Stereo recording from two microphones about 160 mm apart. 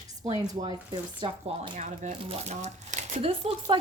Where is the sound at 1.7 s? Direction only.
45° right (ahead or behind).